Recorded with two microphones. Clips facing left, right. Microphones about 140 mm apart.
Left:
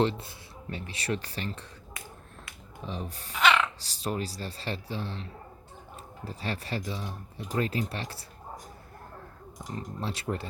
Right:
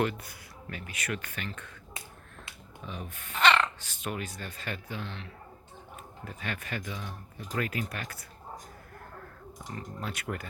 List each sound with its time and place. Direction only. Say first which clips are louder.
0.0 s speech: left 3 dB; 25° left (ahead or behind)
2.8 s speech: left 4 dB; 35° left (ahead or behind)
3.3 s a sound: even; 5° left (ahead or behind)
3.8 s speech: left 4 dB; 35° left (ahead or behind)
9.7 s speech: left 3 dB; 30° left (ahead or behind)